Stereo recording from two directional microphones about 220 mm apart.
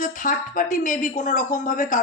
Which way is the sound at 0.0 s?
35° left (ahead or behind).